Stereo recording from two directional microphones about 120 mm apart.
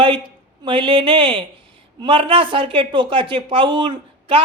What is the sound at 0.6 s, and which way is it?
Speech, 45° right (ahead or behind).